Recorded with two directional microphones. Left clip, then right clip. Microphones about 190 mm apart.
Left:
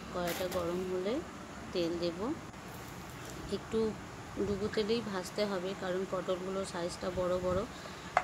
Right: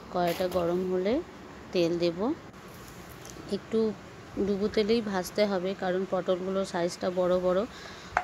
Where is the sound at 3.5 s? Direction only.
30° right (ahead or behind).